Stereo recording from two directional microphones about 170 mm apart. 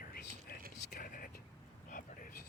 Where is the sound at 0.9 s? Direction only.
55° left (ahead or behind).